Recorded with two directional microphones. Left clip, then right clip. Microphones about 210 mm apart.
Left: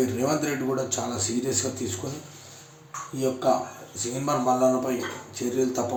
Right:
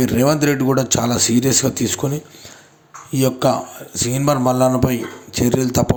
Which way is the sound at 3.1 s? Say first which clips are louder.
Right 7 dB; 45° right (ahead or behind).